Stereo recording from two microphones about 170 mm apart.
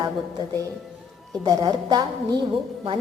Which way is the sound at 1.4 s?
25° right (ahead or behind).